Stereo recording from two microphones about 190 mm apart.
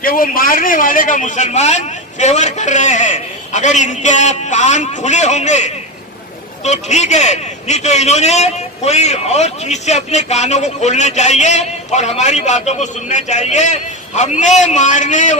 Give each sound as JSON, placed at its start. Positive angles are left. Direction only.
{"t": 0.0, "sound": "a man's voice", "side_deg": 50}